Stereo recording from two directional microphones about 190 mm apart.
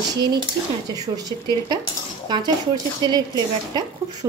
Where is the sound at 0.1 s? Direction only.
20° right (ahead or behind).